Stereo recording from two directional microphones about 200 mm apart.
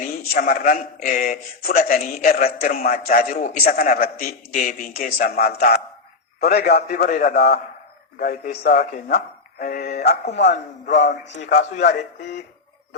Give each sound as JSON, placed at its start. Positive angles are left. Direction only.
{"t": 0.3, "sound": "a man's voice", "side_deg": 45}
{"t": 11.4, "sound": "a man's voice", "side_deg": 40}